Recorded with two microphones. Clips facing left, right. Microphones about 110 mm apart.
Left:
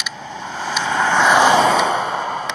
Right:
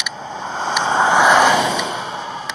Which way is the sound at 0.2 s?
25° right (ahead or behind).